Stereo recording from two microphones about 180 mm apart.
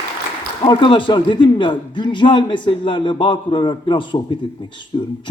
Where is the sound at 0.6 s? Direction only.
25° left (ahead or behind).